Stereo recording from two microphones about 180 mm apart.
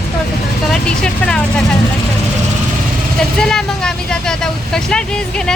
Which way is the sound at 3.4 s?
5° left (ahead or behind).